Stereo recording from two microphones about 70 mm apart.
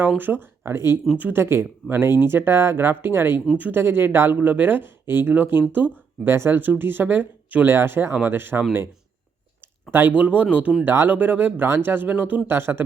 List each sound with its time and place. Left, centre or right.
0.2 s speech: right
2.0 s speech: left
2.3 s speech: right
10.1 s speech: right
10.8 s speech: right